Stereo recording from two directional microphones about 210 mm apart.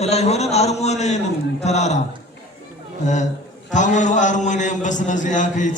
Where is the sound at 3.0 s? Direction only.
35° left (ahead or behind).